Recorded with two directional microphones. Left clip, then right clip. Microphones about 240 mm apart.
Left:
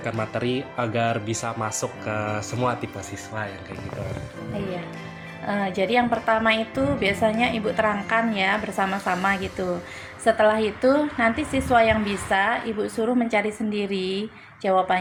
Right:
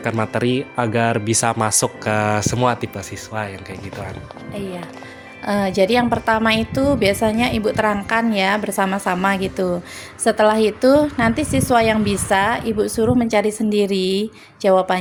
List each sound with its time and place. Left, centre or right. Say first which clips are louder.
0.0 s speech: right 6 dB; right
5.5 s a woman's voice: right 7 dB; right